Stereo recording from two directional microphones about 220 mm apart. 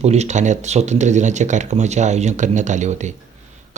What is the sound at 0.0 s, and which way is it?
Speech, 30° right (ahead or behind).